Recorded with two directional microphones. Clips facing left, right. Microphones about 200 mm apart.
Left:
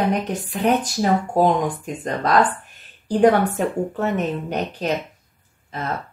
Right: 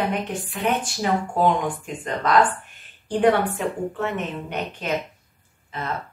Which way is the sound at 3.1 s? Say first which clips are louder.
Left 3 dB; 40° left (ahead or behind).